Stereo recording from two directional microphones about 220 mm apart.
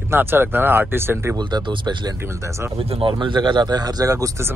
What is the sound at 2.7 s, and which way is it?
Speech, 25° right (ahead or behind).